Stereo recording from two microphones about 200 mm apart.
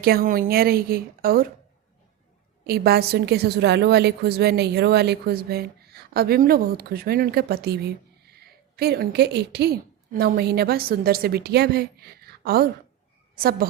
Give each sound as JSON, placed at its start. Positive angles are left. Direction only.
{"t": 0.0, "sound": "a woman's voice", "side_deg": -50}
{"t": 2.6, "sound": "a woman's voice", "side_deg": -50}